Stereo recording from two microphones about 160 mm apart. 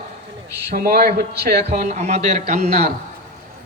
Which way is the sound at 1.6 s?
45° right (ahead or behind).